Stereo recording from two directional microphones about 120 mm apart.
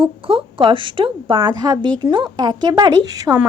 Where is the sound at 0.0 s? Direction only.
45° right (ahead or behind).